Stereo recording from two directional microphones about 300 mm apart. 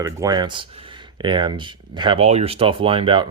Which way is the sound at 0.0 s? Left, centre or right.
Centre.